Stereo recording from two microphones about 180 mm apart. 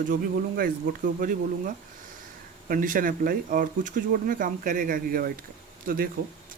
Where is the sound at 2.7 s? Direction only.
50° right (ahead or behind).